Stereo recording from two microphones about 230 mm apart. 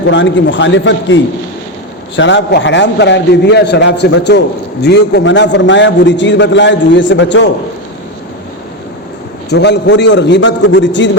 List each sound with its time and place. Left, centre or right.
0.1 s a man's voice: left
9.5 s a man's voice: left